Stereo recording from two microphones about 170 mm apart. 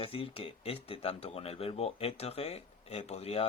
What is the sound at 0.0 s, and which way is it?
Speech, 30° left (ahead or behind).